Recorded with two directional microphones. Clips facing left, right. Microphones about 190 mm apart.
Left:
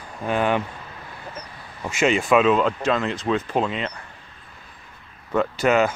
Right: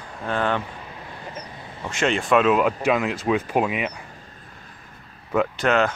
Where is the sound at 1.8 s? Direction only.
5° left (ahead or behind); by 3.9 s 10° right (ahead or behind).